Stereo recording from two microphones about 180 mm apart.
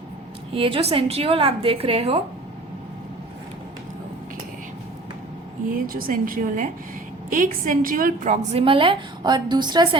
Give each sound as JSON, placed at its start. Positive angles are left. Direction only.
{"t": 0.5, "sound": "a woman's voice", "side_deg": -30}
{"t": 5.7, "sound": "a woman's voice", "side_deg": -50}